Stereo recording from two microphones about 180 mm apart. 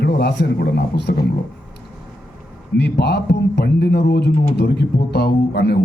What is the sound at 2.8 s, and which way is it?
A man's voice, 70° left (ahead or behind).